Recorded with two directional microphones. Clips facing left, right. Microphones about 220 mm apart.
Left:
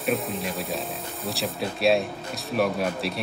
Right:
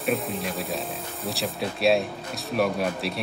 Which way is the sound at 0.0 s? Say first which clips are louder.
Even; centre (ahead or behind).